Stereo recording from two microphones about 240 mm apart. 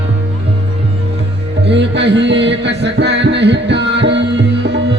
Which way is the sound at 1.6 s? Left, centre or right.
Right.